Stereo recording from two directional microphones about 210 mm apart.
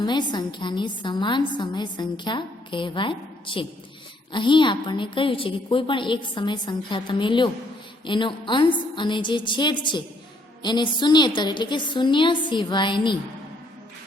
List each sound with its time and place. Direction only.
0.0 s a woman's voice: 20° left (ahead or behind)